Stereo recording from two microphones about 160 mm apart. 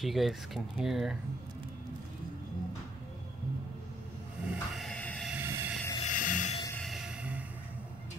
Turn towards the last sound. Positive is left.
turn(degrees=-5)  # may be behind; listen again after turning